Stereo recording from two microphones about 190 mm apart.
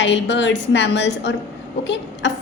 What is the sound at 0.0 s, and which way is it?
A woman's voice, 70° left (ahead or behind).